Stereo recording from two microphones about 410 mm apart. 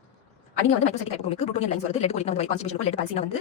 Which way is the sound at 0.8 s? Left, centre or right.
Centre.